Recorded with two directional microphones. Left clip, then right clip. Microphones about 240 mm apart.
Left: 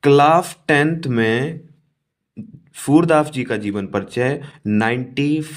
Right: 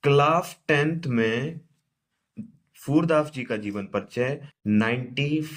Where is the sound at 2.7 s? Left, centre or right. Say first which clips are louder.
Left 8 dB; left.